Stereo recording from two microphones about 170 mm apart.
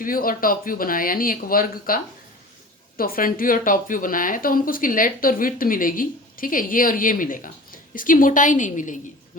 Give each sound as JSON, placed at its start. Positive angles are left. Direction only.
{"t": 0.0, "sound": "speech", "side_deg": 55}
{"t": 3.0, "sound": "speech", "side_deg": 55}